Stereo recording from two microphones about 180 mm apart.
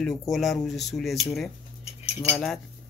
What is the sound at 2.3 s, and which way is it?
Speech, centre (ahead or behind).